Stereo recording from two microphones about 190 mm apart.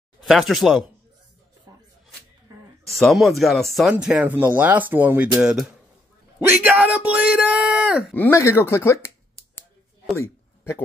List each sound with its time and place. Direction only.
0.2 s speech: centre (ahead or behind)
3.0 s speech: centre (ahead or behind)
8.1 s speech: 10° left (ahead or behind)
10.1 s a sound: 15° left (ahead or behind)